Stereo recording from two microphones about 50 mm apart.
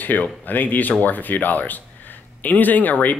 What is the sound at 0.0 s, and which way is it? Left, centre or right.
Speech, left.